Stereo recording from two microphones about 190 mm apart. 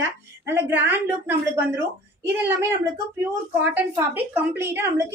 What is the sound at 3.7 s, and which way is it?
A woman's voice, 10° right (ahead or behind).